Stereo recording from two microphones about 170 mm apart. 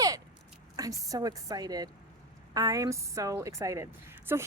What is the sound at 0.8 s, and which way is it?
A woman's voice, 20° right (ahead or behind).